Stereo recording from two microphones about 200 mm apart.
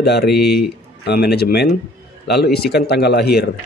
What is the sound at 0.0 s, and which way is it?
Speech, 55° left (ahead or behind).